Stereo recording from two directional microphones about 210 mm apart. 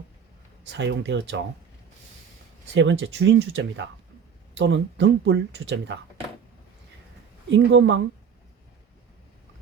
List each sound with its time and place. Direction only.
0.7 s speech: 55° right (ahead or behind)
2.7 s speech: 60° right (ahead or behind)
7.5 s speech: 60° right (ahead or behind)